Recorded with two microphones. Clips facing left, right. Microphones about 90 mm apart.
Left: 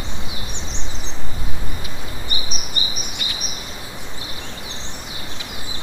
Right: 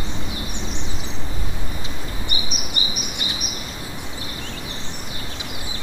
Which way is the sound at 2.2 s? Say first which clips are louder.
Right 1 dB; 35° left (ahead or behind).